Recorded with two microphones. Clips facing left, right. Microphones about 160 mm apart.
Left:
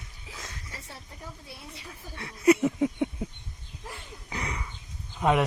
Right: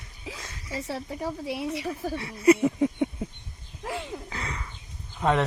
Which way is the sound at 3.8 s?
90° right.